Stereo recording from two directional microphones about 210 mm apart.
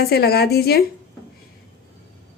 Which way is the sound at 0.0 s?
50° left (ahead or behind).